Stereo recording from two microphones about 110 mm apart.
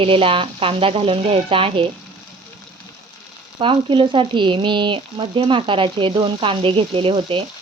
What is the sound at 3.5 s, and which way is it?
Speech, 50° right (ahead or behind).